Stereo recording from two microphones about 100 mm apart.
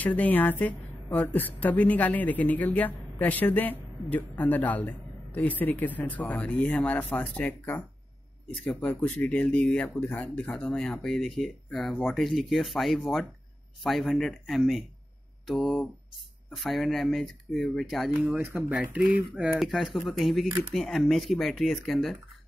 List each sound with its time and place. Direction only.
0.0 s a woman's voice: 15° left (ahead or behind)
9.0 s a woman's voice: 15° left (ahead or behind)
18.3 s speech: 15° right (ahead or behind)
19.6 s speech: centre (ahead or behind)